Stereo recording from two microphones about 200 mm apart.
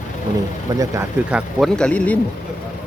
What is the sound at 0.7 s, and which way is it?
Speech, 15° right (ahead or behind).